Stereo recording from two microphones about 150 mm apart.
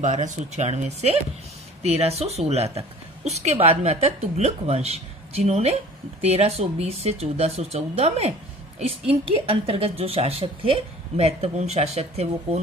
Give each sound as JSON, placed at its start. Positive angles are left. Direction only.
{"t": 0.0, "sound": "speech", "side_deg": -50}
{"t": 9.5, "sound": "speech", "side_deg": -40}